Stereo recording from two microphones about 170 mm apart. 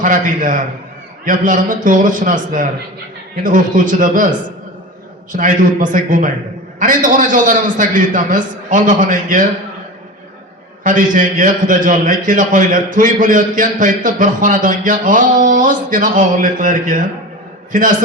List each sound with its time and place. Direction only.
0.0 s a man's voice: 50° right (ahead or behind)
10.8 s a man's voice: 50° right (ahead or behind)